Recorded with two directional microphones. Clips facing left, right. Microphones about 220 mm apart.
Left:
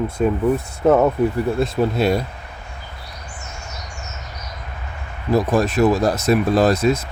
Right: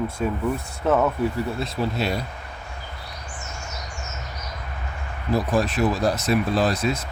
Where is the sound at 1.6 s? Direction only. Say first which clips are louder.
Left 10 dB; 50° left (ahead or behind).